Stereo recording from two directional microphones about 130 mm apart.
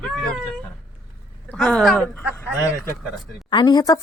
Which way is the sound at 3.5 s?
35° left (ahead or behind).